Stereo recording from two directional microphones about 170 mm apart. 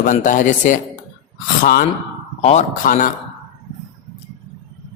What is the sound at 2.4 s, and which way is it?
Speech, 45° left (ahead or behind).